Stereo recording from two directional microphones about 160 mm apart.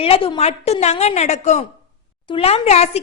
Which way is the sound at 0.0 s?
35° left (ahead or behind).